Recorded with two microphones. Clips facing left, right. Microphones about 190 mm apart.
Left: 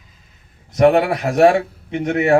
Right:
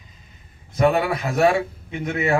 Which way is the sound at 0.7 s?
75° left (ahead or behind).